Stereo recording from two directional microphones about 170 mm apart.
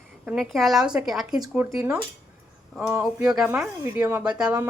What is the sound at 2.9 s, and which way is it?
A woman's voice, 15° right (ahead or behind).